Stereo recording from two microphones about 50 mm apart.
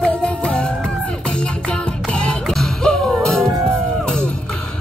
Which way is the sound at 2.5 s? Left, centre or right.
Centre.